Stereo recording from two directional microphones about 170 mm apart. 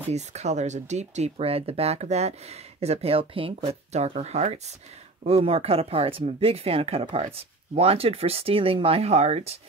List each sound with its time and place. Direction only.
0.1 s speech: 40° right (ahead or behind)